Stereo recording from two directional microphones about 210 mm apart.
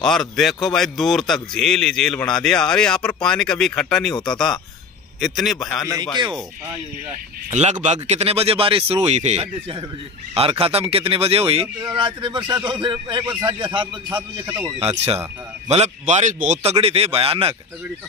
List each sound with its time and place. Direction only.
0.0 s a man's voice: centre (ahead or behind)
7.5 s a man's voice: 35° right (ahead or behind); by 14.7 s 15° right (ahead or behind)
14.8 s a man's voice: 30° right (ahead or behind)